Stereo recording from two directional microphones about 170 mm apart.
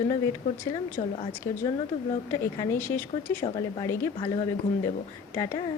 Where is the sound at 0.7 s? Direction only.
30° left (ahead or behind).